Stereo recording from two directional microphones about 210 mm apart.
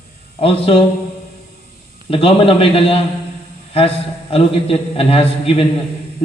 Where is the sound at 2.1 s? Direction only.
25° left (ahead or behind).